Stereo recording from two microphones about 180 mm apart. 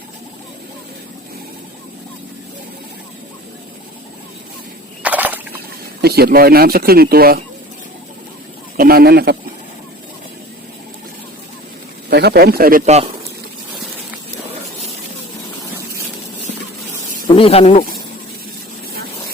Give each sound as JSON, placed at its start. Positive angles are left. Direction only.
{"t": 5.0, "sound": "a sound", "side_deg": -10}
{"t": 6.0, "sound": "speech", "side_deg": -60}
{"t": 8.7, "sound": "a man's voice", "side_deg": -55}
{"t": 12.1, "sound": "speech", "side_deg": -65}
{"t": 12.8, "sound": "speech", "side_deg": -40}
{"t": 17.2, "sound": "speech", "side_deg": 30}